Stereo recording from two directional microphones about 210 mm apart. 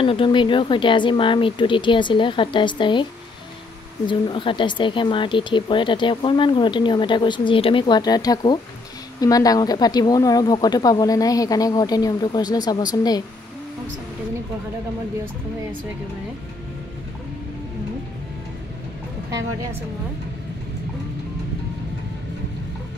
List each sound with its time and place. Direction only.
0.0 s speech: 25° left (ahead or behind)
4.1 s speech: 25° left (ahead or behind)